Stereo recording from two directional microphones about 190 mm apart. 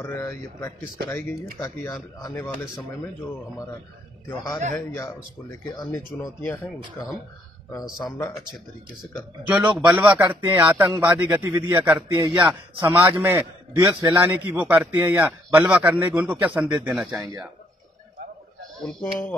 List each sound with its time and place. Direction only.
0.0 s speech: 10° left (ahead or behind)
4.7 s speech: 10° left (ahead or behind)
9.5 s speech: 10° right (ahead or behind)
12.2 s a man's voice: 25° right (ahead or behind)
18.8 s speech: 5° left (ahead or behind)